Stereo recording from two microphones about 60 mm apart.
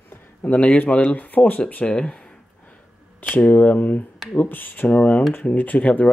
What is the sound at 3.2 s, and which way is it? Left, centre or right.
Speech, left.